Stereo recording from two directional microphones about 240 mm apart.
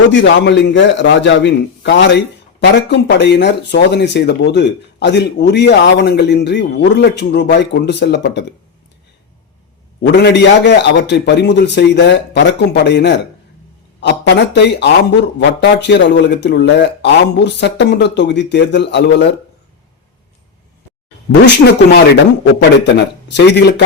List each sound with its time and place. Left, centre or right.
0.1 s speech: left
10.0 s speech: left
21.4 s speech: left